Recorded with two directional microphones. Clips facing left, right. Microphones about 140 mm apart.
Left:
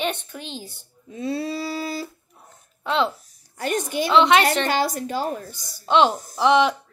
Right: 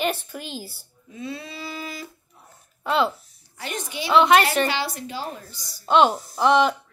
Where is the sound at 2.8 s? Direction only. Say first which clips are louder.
Even; 5° right (ahead or behind).